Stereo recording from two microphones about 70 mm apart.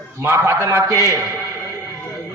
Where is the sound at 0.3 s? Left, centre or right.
Right.